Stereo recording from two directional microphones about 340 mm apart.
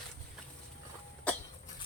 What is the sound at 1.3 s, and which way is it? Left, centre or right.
Cough, centre.